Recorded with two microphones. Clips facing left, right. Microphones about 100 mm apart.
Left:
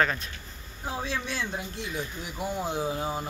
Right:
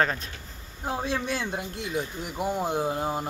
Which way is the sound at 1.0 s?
50° right (ahead or behind).